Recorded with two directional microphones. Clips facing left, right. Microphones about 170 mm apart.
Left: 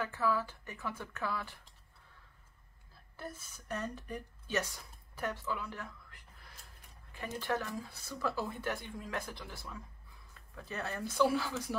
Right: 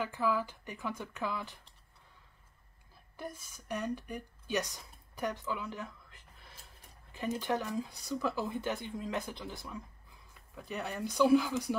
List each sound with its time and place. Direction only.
0.0 s a woman's voice: 15° right (ahead or behind)
3.2 s a woman's voice: 15° right (ahead or behind)
7.2 s a woman's voice: 15° right (ahead or behind)